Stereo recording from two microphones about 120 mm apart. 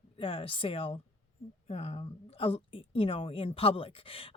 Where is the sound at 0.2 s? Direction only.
50° left (ahead or behind).